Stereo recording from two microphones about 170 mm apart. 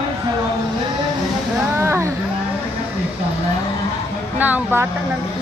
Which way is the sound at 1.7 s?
15° right (ahead or behind).